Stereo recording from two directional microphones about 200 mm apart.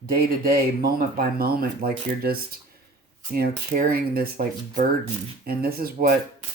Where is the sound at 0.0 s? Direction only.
45° right (ahead or behind).